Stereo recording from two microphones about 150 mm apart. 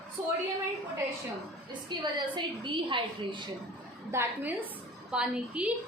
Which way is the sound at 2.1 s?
30° right (ahead or behind).